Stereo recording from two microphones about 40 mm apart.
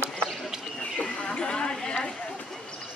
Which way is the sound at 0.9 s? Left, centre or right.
Left.